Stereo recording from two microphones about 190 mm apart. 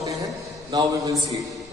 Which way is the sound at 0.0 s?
15° right (ahead or behind).